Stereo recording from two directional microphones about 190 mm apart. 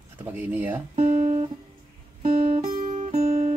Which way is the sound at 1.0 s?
40° right (ahead or behind).